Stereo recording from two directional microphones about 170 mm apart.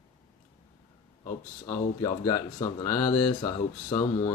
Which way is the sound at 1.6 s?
20° left (ahead or behind).